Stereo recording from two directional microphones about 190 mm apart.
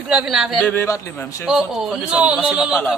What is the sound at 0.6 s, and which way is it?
Speech, 10° left (ahead or behind).